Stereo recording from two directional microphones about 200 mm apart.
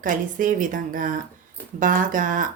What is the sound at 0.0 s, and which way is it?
A woman's voice, 40° right (ahead or behind).